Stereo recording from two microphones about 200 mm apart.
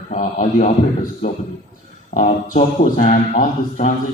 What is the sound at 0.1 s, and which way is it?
Speech, 40° left (ahead or behind).